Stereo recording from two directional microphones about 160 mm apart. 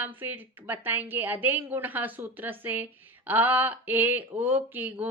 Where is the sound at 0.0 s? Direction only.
10° right (ahead or behind).